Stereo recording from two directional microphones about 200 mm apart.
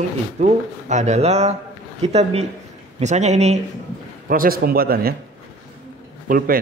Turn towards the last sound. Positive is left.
turn(degrees=-45)  # may be behind; listen again after turning